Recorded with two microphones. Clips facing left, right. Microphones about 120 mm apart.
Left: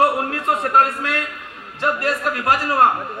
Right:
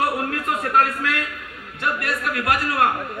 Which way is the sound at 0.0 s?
30° left (ahead or behind).